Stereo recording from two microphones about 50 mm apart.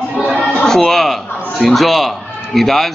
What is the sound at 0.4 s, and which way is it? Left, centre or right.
Chatter, left.